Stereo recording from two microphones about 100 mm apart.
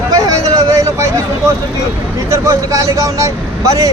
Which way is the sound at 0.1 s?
35° right (ahead or behind).